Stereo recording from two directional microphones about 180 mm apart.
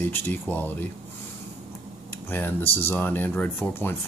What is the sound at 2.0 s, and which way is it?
Speech, 10° left (ahead or behind).